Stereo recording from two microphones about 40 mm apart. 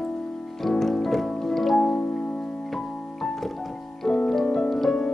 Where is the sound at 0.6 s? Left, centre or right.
Centre.